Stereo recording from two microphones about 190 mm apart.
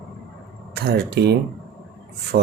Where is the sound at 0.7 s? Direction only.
55° right (ahead or behind).